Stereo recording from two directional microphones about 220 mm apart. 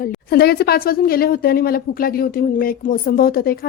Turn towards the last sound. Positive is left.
turn(degrees=40)  # may be behind; listen again after turning